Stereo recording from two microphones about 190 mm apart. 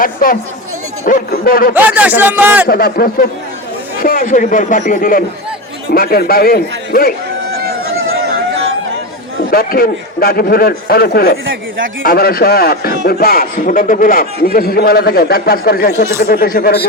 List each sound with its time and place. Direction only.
0.0 s a man's voice: 50° left (ahead or behind)
1.7 s speech: 10° right (ahead or behind)
2.6 s a man's voice: 50° left (ahead or behind)
9.5 s a man's voice: 50° left (ahead or behind)